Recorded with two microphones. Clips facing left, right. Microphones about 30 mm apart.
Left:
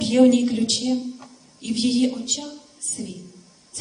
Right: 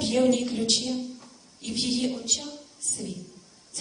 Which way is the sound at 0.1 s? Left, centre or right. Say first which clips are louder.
Left 8 dB; centre.